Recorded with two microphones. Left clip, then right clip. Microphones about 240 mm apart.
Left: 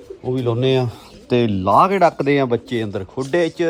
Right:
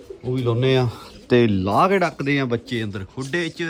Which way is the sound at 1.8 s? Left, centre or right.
Centre.